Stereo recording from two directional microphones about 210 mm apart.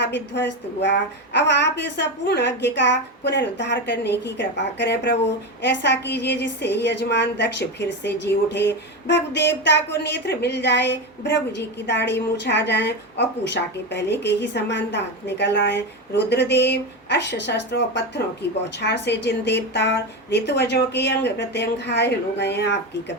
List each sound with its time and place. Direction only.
0.0 s a woman's voice: 55° left (ahead or behind)